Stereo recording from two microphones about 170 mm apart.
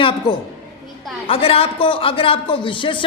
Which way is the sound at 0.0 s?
30° left (ahead or behind).